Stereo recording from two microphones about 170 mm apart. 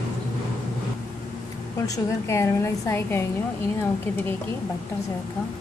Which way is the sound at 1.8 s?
20° left (ahead or behind).